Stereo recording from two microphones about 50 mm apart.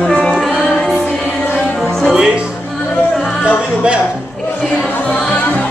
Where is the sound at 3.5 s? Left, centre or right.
Right.